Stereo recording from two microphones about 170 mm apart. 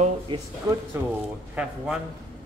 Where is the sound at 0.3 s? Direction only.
30° right (ahead or behind).